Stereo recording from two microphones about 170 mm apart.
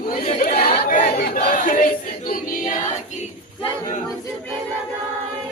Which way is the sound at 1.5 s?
50° left (ahead or behind).